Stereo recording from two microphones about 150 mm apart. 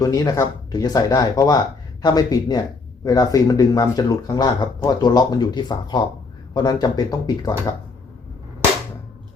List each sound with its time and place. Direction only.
0.0 s speech: 25° left (ahead or behind)